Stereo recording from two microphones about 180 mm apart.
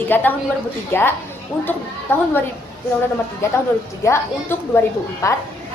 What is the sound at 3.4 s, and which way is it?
Speech, 15° left (ahead or behind).